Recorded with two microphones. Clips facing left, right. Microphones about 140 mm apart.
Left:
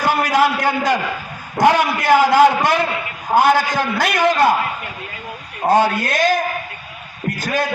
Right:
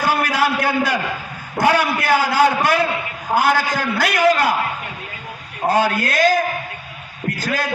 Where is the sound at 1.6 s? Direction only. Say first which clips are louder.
Left 3 dB; 20° left (ahead or behind).